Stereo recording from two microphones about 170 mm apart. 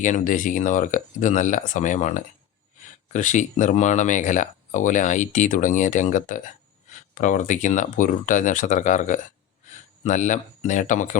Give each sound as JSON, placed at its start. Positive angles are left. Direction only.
{"t": 0.0, "sound": "speech", "side_deg": 50}